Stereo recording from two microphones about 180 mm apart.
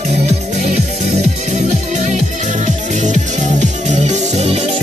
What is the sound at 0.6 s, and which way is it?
Music, 40° right (ahead or behind).